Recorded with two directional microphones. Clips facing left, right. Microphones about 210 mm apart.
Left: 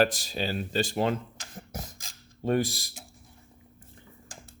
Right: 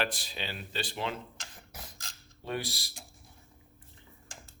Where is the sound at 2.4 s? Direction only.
45° left (ahead or behind).